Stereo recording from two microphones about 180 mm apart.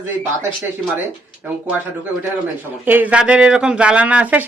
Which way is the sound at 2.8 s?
10° right (ahead or behind).